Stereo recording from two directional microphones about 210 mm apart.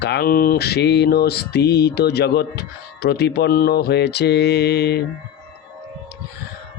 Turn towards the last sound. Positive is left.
turn(degrees=50)  # may be behind; listen again after turning